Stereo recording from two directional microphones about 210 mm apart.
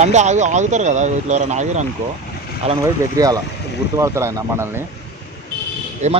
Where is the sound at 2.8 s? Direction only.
15° right (ahead or behind).